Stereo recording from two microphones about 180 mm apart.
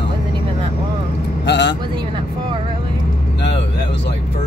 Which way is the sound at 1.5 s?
75° left (ahead or behind).